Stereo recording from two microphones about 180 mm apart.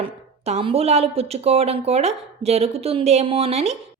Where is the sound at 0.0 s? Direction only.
35° right (ahead or behind).